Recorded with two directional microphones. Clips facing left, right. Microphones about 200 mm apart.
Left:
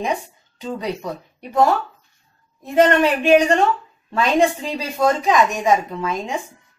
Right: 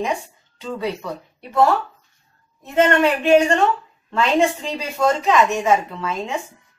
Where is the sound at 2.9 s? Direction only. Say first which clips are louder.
Even; 15° left (ahead or behind).